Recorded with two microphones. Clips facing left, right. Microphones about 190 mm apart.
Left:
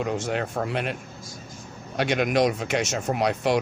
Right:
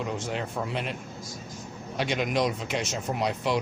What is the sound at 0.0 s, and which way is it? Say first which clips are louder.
Speech: left 5 dB; 65° left (ahead or behind).